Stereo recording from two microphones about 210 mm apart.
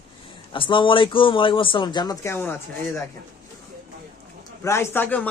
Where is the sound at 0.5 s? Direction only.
25° left (ahead or behind).